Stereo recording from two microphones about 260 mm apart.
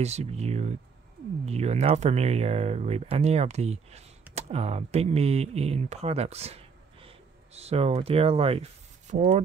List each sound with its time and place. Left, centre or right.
0.0 s speech: right